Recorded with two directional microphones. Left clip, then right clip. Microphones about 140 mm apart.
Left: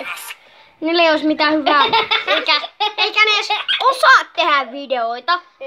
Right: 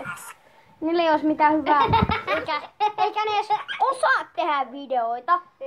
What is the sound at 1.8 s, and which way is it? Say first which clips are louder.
Speech: left 6 dB; 15° left (ahead or behind).